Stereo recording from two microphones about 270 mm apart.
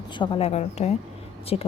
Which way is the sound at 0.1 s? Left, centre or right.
Centre.